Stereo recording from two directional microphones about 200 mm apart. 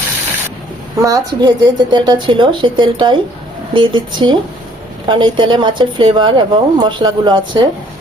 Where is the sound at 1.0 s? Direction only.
20° right (ahead or behind).